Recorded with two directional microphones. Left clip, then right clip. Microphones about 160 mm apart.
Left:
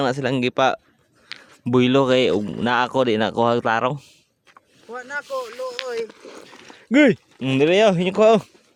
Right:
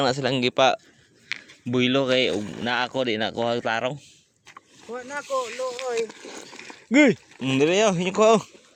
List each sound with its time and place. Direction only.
0.0 s speech: 40° left (ahead or behind)
1.6 s speech: 55° left (ahead or behind)
4.9 s speech: 10° right (ahead or behind)
6.0 s speech: 30° right (ahead or behind)
6.9 s speech: 45° left (ahead or behind)